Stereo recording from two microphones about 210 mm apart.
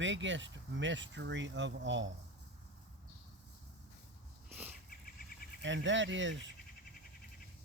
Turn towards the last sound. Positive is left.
turn(degrees=-60)  # may be behind; listen again after turning